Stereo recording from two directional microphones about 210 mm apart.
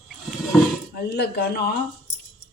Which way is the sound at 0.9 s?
50° left (ahead or behind).